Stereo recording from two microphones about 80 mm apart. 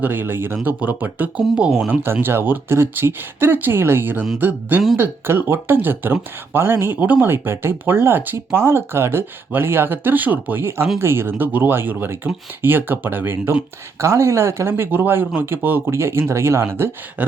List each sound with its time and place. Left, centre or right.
0.0 s speech: right
2.2 s speech: right
14.0 s speech: right